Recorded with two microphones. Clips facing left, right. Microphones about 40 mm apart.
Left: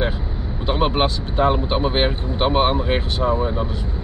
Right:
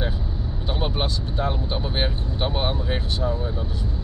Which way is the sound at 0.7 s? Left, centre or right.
Left.